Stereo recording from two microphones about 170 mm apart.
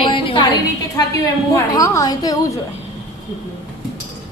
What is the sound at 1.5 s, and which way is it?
Speech, 20° left (ahead or behind).